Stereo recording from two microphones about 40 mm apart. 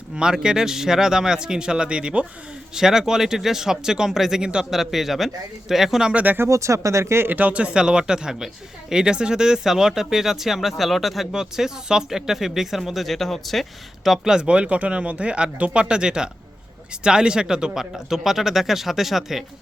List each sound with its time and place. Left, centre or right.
0.2 s speech: centre
2.7 s speech: centre
6.3 s speech: right
7.3 s speech: right; by 11.3 s centre
11.3 s speech: centre
14.3 s speech: right
17.9 s speech: centre